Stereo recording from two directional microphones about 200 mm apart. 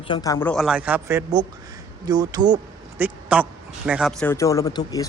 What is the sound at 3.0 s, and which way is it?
Speech, 5° right (ahead or behind).